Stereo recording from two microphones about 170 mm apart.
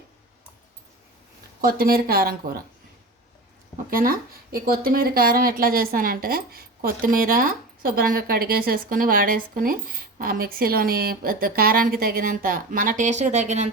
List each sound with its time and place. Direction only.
1.6 s speech: 60° right (ahead or behind)
3.8 s speech: 55° right (ahead or behind)